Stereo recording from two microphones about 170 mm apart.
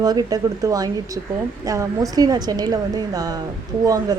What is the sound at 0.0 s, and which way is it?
Speech, 25° right (ahead or behind).